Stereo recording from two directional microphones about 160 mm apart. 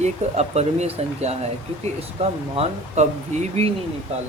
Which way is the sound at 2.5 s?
45° right (ahead or behind).